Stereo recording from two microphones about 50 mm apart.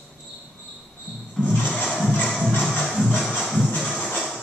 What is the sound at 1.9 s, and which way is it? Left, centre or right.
Music, centre.